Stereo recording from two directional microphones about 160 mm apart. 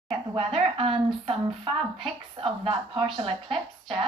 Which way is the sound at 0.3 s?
35° right (ahead or behind).